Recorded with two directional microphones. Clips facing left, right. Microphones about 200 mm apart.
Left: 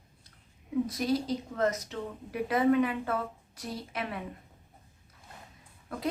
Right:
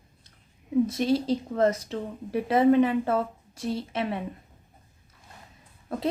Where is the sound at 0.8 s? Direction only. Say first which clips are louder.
Right 5 dB; 25° right (ahead or behind).